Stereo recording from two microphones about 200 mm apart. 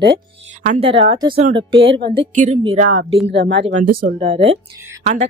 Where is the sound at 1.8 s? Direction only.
65° right (ahead or behind).